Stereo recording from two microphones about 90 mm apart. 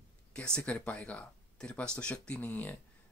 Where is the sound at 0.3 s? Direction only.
10° left (ahead or behind).